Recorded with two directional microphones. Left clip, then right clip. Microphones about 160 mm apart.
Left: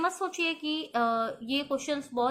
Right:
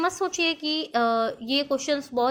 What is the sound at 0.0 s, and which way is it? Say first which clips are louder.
A woman's voice: right 5 dB; 40° right (ahead or behind).